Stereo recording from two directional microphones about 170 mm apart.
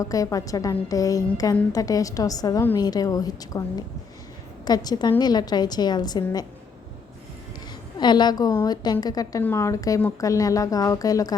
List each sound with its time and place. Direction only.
0.0 s a woman's voice: 20° left (ahead or behind)
7.9 s a woman's voice: 25° left (ahead or behind)